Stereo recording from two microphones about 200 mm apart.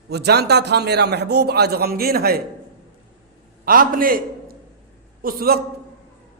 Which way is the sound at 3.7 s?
45° right (ahead or behind).